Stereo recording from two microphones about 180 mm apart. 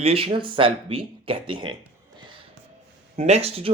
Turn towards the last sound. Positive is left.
turn(degrees=-35)  # may be behind; listen again after turning